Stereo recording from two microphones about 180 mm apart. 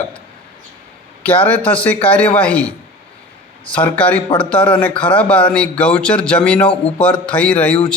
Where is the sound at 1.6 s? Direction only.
10° left (ahead or behind).